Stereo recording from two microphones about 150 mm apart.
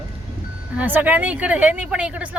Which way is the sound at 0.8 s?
10° right (ahead or behind).